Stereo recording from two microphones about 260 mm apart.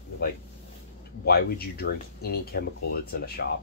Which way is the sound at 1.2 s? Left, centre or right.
Left.